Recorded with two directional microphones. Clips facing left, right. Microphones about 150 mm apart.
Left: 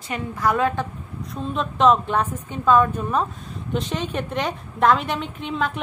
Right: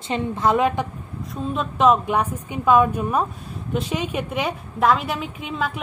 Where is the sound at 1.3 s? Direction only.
5° right (ahead or behind).